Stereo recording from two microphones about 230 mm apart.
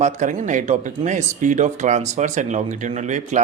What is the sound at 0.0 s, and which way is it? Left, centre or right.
Speech, right.